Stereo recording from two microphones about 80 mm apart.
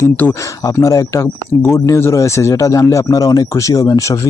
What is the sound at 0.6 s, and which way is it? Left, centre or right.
Speech, left.